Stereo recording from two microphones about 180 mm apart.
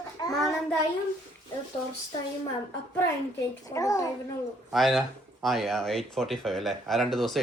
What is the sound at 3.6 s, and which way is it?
Speech, 20° left (ahead or behind).